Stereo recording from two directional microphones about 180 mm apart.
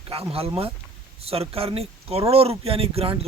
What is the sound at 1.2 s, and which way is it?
Speech, 35° right (ahead or behind).